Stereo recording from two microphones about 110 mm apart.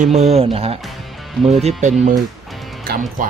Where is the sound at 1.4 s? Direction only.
70° right (ahead or behind).